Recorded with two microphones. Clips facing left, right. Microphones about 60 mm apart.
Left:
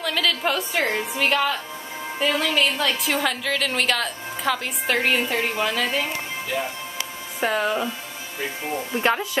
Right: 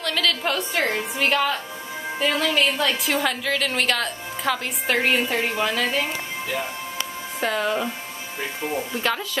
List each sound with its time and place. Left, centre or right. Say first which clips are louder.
0.0 s a woman's voice: left 1 dB; centre
7.3 s speech: left 1 dB; centre
8.9 s speech: left 3 dB; left